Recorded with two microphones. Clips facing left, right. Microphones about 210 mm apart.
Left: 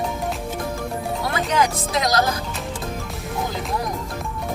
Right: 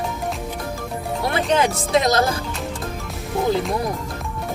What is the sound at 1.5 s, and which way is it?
Speech, 30° right (ahead or behind).